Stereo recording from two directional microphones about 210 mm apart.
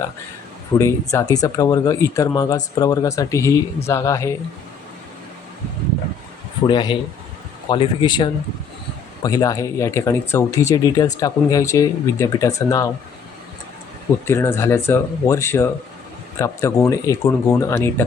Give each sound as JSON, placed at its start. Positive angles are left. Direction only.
{"t": 0.8, "sound": "speech", "side_deg": 15}
{"t": 6.7, "sound": "speech", "side_deg": 20}
{"t": 14.3, "sound": "speech", "side_deg": 10}